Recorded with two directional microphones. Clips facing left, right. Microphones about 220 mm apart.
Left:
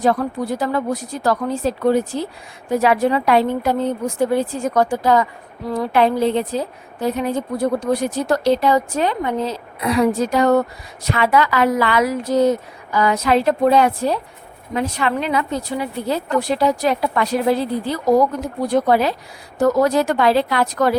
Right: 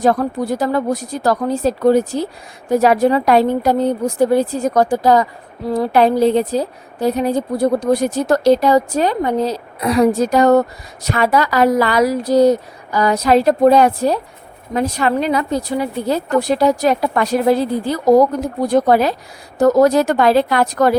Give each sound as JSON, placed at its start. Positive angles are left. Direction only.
{"t": 0.0, "sound": "a woman's voice", "side_deg": -40}